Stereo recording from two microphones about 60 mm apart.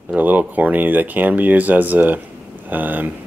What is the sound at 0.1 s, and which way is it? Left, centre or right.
Speech, right.